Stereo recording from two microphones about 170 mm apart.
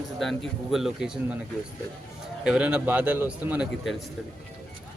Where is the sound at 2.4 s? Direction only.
5° right (ahead or behind).